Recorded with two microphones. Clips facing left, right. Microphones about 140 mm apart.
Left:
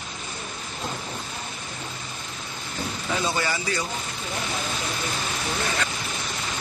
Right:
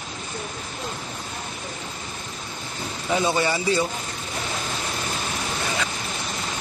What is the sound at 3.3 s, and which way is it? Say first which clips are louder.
Speech: right 5 dB; 25° right (ahead or behind).